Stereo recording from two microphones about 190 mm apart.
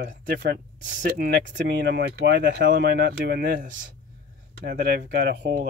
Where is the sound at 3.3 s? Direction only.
50° right (ahead or behind).